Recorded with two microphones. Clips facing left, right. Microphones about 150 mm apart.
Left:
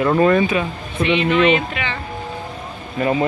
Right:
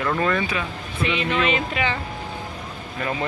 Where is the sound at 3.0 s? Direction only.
25° left (ahead or behind).